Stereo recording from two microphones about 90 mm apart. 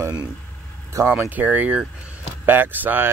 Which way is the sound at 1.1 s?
20° right (ahead or behind).